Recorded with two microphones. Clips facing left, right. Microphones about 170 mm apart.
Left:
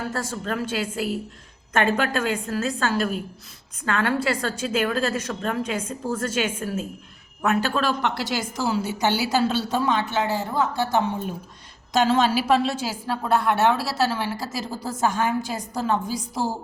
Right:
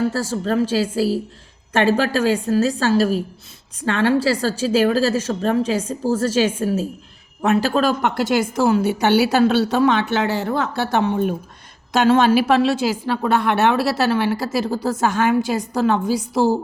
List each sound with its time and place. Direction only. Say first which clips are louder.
0.1 s a woman's voice: right 7 dB; 30° right (ahead or behind)
7.7 s a woman's voice: right 5 dB; 45° right (ahead or behind); by 16.6 s 70° right (ahead or behind)